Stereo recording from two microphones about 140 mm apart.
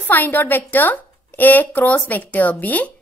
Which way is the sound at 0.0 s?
15° left (ahead or behind).